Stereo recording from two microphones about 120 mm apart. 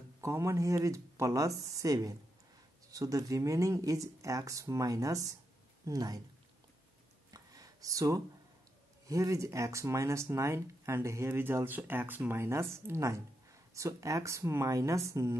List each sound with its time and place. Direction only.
0.2 s speech: 25° right (ahead or behind)
7.2 s a sound: 30° right (ahead or behind)
9.0 s speech: 25° right (ahead or behind)